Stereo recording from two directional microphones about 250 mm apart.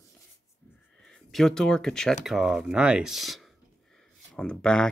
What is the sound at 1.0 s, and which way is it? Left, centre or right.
Speech, centre.